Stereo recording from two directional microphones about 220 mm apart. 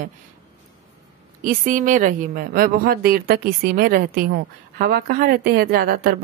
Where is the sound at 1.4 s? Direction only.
40° right (ahead or behind).